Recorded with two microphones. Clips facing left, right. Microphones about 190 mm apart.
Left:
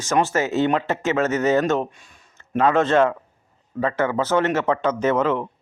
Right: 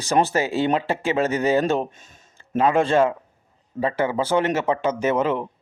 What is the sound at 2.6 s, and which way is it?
Speech, 10° right (ahead or behind).